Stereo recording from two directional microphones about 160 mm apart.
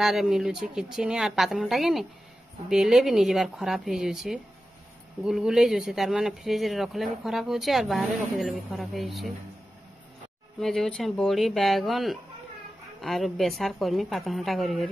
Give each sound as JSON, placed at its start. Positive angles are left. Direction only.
{"t": 0.0, "sound": "speech", "side_deg": 0}
{"t": 10.6, "sound": "speech", "side_deg": 0}